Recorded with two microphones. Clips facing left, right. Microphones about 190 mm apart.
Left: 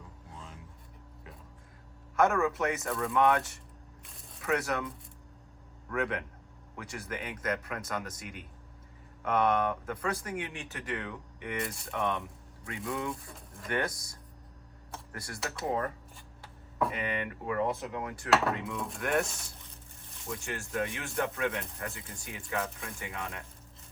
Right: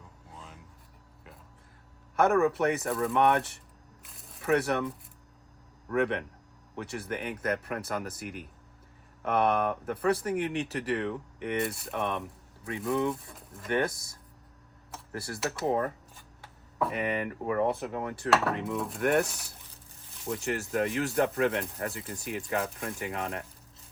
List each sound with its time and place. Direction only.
0.3 s music: centre (ahead or behind)
2.1 s speech: 35° right (ahead or behind)
4.0 s a sound: centre (ahead or behind)
4.4 s speech: 30° right (ahead or behind)
5.9 s speech: 30° right (ahead or behind)
9.2 s speech: 35° right (ahead or behind)
13.1 s speech: centre (ahead or behind)
13.7 s speech: 25° right (ahead or behind)
15.1 s speech: 30° right (ahead or behind)
17.0 s speech: 35° right (ahead or behind)
18.7 s speech: centre (ahead or behind)
20.2 s speech: 35° right (ahead or behind)